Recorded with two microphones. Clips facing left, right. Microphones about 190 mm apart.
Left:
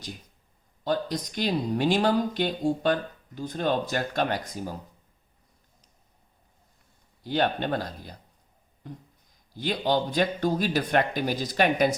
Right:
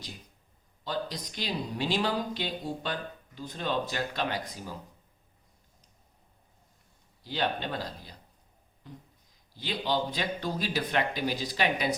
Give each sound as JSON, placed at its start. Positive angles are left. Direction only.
{"t": 0.9, "sound": "speech", "side_deg": 50}
{"t": 7.3, "sound": "speech", "side_deg": 55}